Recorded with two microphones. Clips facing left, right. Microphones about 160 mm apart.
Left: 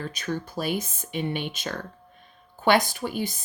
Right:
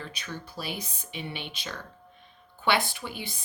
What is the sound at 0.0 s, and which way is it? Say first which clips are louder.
Speech: left 8 dB; 45° left (ahead or behind).